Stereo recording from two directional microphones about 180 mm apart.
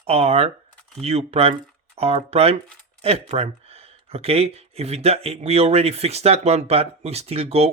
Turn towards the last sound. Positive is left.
turn(degrees=-35)  # may be behind; listen again after turning